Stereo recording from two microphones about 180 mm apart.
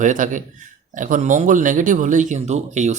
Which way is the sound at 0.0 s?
45° right (ahead or behind).